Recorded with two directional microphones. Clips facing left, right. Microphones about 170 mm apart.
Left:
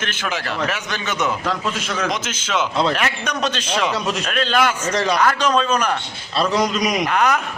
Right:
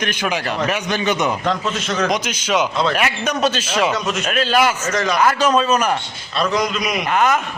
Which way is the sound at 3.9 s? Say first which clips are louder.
Right 1 dB; 30° left (ahead or behind).